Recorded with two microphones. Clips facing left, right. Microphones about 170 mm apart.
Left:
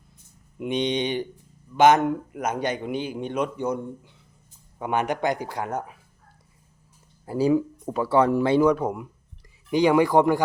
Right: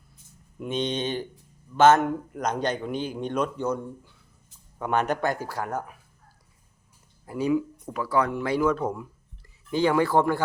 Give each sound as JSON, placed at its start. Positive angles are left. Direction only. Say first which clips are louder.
{"t": 0.6, "sound": "a man's voice", "louder": "left 3 dB", "side_deg": 15}
{"t": 7.3, "sound": "speech", "louder": "left 4 dB", "side_deg": 30}
{"t": 8.7, "sound": "a man's voice", "louder": "left 2 dB", "side_deg": 15}